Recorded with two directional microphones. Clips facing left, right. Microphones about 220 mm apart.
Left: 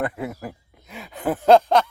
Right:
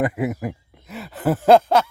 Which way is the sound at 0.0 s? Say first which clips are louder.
Right 5 dB; 15° right (ahead or behind).